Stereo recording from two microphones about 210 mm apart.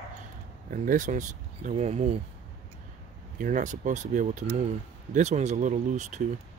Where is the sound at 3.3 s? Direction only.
40° right (ahead or behind).